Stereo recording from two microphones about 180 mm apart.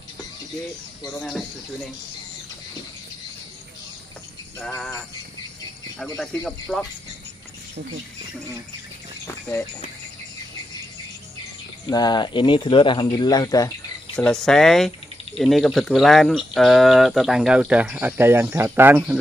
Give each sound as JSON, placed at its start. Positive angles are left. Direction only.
{"t": 1.1, "sound": "speech", "side_deg": 0}
{"t": 4.6, "sound": "a sound", "side_deg": 10}
{"t": 6.1, "sound": "speech", "side_deg": 0}
{"t": 11.8, "sound": "speech", "side_deg": 20}
{"t": 14.1, "sound": "speech", "side_deg": 5}